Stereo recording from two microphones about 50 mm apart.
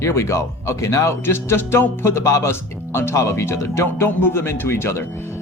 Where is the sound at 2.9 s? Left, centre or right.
Left.